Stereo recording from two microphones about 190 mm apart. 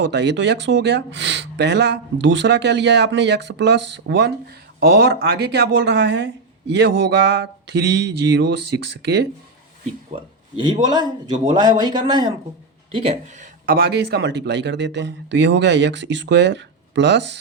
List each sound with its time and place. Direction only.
0.0 s speech: 65° right (ahead or behind)
11.5 s speech: 20° right (ahead or behind); by 13.7 s 40° right (ahead or behind)
13.7 s a man's voice: 60° right (ahead or behind)